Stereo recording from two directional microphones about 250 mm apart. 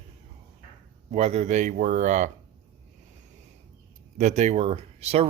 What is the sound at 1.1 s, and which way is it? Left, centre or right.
Speech, right.